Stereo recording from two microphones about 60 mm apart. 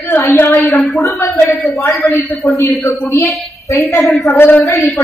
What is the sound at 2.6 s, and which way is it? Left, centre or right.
A woman's voice, left.